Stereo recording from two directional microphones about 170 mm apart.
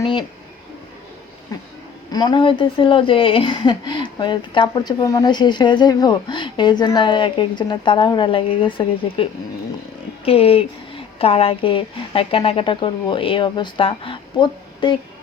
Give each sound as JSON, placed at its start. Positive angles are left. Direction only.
{"t": 0.0, "sound": "speech", "side_deg": 30}
{"t": 2.1, "sound": "speech", "side_deg": 25}
{"t": 10.2, "sound": "a woman's voice", "side_deg": 35}